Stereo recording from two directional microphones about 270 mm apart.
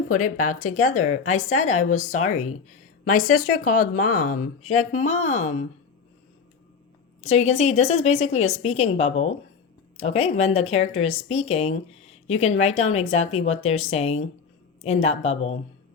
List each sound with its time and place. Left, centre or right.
0.1 s speech: left
2.2 s speech: left
3.2 s a woman's voice: left
3.7 s speech: left
5.0 s speech: left
7.2 s speech: left